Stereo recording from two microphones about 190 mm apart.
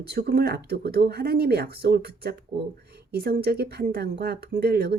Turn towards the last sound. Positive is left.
turn(degrees=-55)  # may be behind; listen again after turning